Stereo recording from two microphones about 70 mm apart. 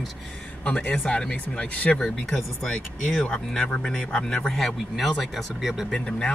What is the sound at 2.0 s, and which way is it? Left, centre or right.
Speech, centre.